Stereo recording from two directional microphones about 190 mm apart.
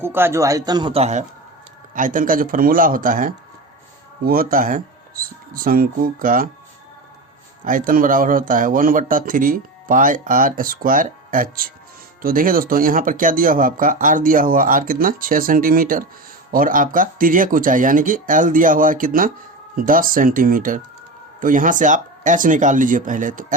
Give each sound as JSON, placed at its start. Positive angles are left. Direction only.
{"t": 0.0, "sound": "speech", "side_deg": -10}
{"t": 2.0, "sound": "speech", "side_deg": -45}
{"t": 7.6, "sound": "speech", "side_deg": -45}